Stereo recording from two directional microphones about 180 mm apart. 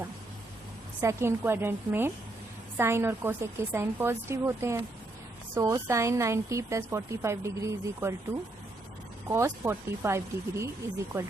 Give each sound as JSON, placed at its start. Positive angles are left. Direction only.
{"t": 1.0, "sound": "a woman's voice", "side_deg": -15}
{"t": 9.3, "sound": "a woman's voice", "side_deg": -15}